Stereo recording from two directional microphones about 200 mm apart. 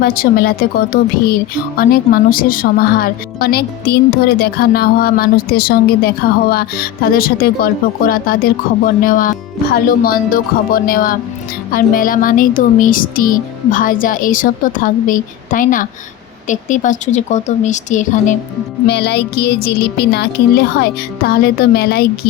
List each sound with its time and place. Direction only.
0.0 s speech: 50° left (ahead or behind)
18.9 s a sound: 55° left (ahead or behind)
21.2 s speech: 50° left (ahead or behind)